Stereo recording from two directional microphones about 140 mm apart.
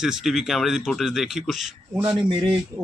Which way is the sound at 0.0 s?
5° right (ahead or behind).